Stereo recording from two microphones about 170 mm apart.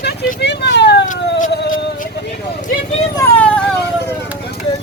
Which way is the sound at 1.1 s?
50° left (ahead or behind).